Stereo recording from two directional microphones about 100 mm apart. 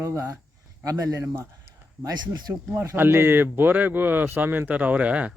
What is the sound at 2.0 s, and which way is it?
Speech, 40° right (ahead or behind).